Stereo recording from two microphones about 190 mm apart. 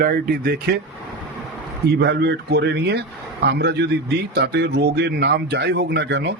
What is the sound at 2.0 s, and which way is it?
A man's voice, 60° right (ahead or behind).